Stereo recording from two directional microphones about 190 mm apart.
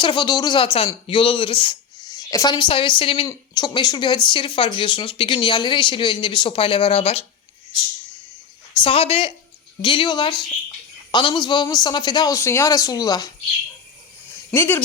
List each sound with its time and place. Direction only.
0.0 s speech: 25° left (ahead or behind)
8.8 s speech: 30° left (ahead or behind)
14.5 s speech: 10° left (ahead or behind)